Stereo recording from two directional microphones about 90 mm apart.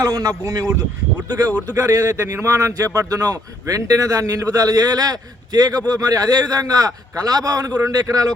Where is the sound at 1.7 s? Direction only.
30° right (ahead or behind).